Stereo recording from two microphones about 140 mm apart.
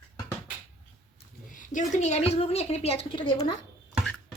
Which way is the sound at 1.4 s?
70° left (ahead or behind).